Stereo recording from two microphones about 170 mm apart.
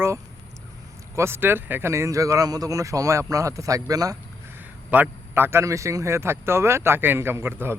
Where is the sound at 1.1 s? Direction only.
15° right (ahead or behind).